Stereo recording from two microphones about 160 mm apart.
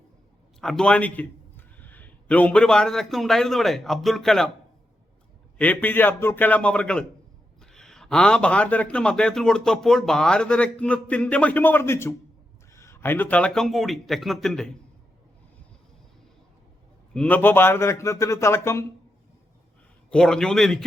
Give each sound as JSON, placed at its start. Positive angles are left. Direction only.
{"t": 0.6, "sound": "a man's voice", "side_deg": 5}
{"t": 5.5, "sound": "a man's voice", "side_deg": 10}
{"t": 17.2, "sound": "a man's voice", "side_deg": 10}
{"t": 20.1, "sound": "speech", "side_deg": 5}